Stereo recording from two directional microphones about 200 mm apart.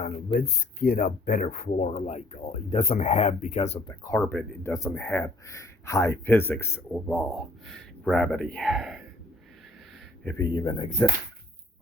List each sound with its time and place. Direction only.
0.3 s speech: 50° left (ahead or behind)
1.9 s speech: 35° left (ahead or behind)
3.8 s speech: 20° left (ahead or behind)
4.2 s speech: 10° left (ahead or behind)
10.2 s speech: 20° left (ahead or behind)